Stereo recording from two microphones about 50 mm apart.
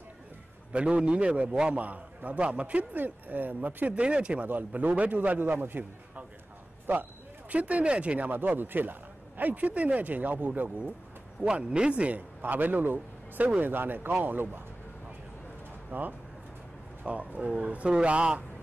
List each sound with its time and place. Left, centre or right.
0.7 s a man's voice: right
4.5 s a man's voice: right
6.9 s speech: right
8.3 s a man's voice: right
11.4 s a man's voice: centre
12.4 s a man's voice: right
15.9 s a man's voice: right
17.0 s a man's voice: right